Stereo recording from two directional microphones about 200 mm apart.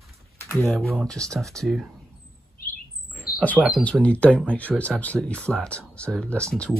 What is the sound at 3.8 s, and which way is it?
Speech, 5° left (ahead or behind).